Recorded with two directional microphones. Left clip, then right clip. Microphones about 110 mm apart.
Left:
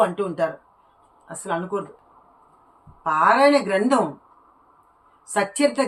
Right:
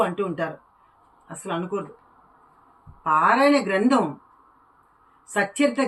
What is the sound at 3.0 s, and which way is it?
Speech, 30° left (ahead or behind).